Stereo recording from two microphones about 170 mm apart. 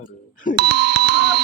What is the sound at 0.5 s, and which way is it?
Speech, 75° right (ahead or behind).